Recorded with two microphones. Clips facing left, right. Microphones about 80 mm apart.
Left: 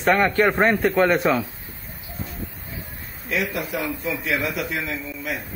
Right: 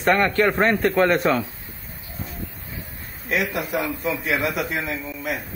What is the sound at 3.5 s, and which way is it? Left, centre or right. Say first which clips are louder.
Speech: right 2 dB; centre.